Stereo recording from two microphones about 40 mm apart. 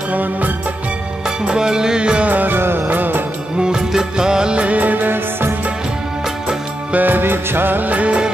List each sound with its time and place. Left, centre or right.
0.1 s music: right
1.5 s music: centre
2.2 s music: right
2.5 s music: right
2.9 s music of bollywood: right
3.5 s music: centre
4.6 s music: right
6.9 s music: right
7.9 s music of bollywood: right